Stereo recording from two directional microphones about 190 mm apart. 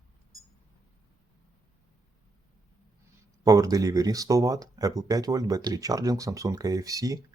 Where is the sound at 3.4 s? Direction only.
20° right (ahead or behind).